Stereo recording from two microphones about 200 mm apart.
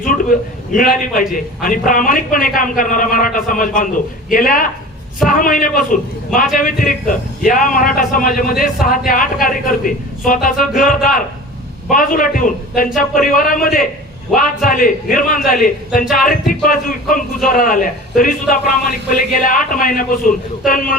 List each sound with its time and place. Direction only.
0.0 s a man's voice: 40° left (ahead or behind)